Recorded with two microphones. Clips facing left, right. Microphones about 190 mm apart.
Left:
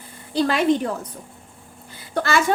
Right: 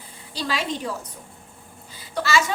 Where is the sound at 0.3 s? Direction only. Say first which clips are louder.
Left 9 dB; 55° left (ahead or behind).